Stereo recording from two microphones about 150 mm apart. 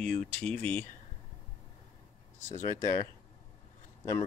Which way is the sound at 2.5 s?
20° left (ahead or behind).